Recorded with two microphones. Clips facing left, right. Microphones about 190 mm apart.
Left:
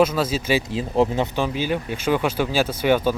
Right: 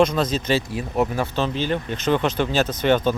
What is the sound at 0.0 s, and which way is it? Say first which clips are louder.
Speech: even; 5° left (ahead or behind).